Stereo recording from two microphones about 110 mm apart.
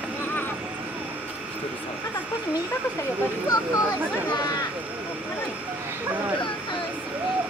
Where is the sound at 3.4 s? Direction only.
30° left (ahead or behind).